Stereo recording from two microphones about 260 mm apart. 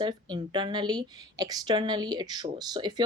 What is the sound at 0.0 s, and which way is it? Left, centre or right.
Speech, centre.